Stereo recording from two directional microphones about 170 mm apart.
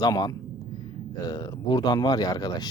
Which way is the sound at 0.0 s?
20° left (ahead or behind).